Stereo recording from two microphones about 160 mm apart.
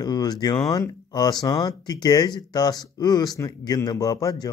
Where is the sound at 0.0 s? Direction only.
25° left (ahead or behind).